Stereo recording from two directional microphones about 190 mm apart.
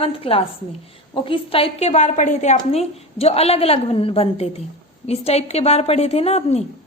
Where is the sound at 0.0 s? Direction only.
30° left (ahead or behind).